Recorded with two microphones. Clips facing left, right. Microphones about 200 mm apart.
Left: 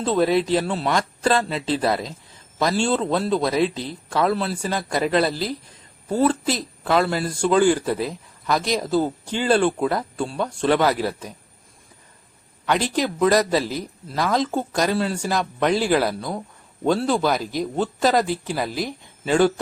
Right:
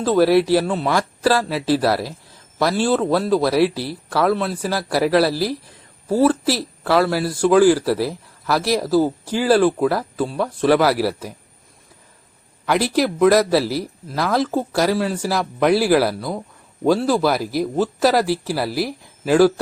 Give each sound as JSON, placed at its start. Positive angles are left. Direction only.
{"t": 0.0, "sound": "speech", "side_deg": 0}
{"t": 4.7, "sound": "speech", "side_deg": -90}
{"t": 5.1, "sound": "speech", "side_deg": -5}
{"t": 12.6, "sound": "speech", "side_deg": -10}